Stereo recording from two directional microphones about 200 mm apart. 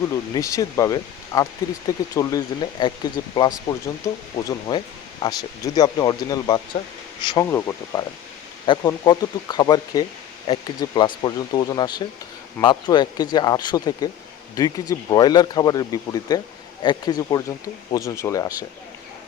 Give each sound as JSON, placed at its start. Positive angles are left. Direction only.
{"t": 0.3, "sound": "speech", "side_deg": 15}